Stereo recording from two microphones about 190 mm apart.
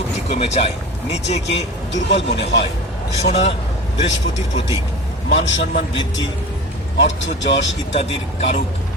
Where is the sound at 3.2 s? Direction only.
35° left (ahead or behind).